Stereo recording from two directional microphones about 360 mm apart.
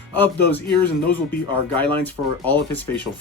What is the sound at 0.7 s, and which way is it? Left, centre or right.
Speech, left.